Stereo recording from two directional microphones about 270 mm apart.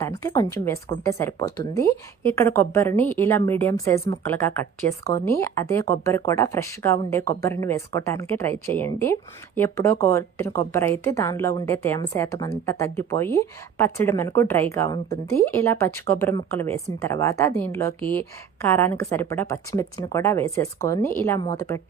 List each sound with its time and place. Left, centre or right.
0.0 s a woman's voice: centre